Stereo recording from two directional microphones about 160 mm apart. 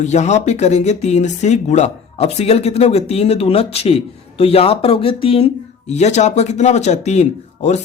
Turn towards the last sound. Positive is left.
turn(degrees=45)  # may be behind; listen again after turning